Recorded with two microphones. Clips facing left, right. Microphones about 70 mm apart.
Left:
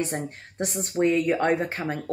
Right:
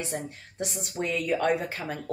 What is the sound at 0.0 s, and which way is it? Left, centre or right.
Speech, left.